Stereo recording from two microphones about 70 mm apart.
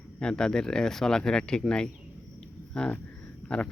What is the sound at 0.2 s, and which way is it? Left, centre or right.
Speech, centre.